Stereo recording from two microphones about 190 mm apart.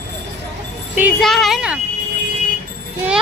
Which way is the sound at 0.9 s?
5° right (ahead or behind).